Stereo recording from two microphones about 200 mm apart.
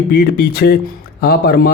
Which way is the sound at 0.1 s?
55° left (ahead or behind).